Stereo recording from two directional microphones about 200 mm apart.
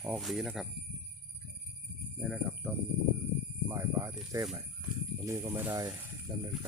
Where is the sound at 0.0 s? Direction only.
Centre (ahead or behind).